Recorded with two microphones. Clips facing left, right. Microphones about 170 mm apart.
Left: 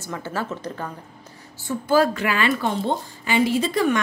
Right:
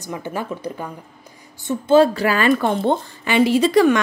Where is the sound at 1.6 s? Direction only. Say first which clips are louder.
Right 5 dB; 25° right (ahead or behind).